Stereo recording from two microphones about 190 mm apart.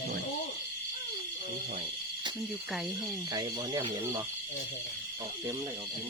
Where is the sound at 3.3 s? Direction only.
25° right (ahead or behind).